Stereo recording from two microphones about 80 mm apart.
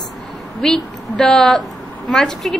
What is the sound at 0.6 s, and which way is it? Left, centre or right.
A woman's voice, centre.